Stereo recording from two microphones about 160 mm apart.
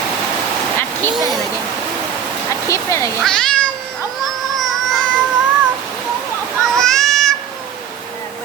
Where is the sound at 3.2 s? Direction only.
5° left (ahead or behind).